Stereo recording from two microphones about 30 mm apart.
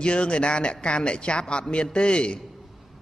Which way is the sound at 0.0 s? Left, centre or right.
Left.